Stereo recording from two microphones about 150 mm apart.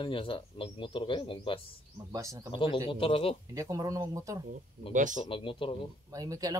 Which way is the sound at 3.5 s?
20° right (ahead or behind).